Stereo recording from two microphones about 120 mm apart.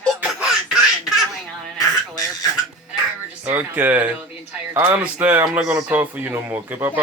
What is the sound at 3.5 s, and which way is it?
Speech, 15° right (ahead or behind).